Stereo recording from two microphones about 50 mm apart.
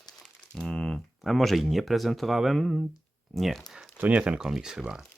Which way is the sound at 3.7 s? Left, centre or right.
Centre.